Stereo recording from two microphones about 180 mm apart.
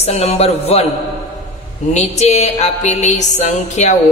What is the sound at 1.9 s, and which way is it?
A man's voice, 35° left (ahead or behind).